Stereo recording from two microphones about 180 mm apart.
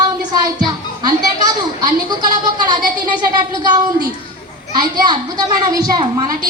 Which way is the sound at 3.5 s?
20° right (ahead or behind).